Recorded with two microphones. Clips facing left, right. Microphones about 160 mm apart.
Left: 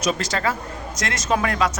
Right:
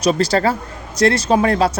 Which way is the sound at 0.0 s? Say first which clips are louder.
Right 7 dB; 35° right (ahead or behind).